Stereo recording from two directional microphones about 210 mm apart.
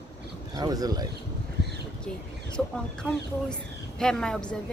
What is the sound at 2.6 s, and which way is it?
Speech, 5° left (ahead or behind).